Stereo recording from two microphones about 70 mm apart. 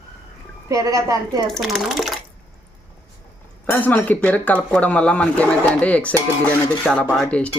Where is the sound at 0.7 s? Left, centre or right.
Right.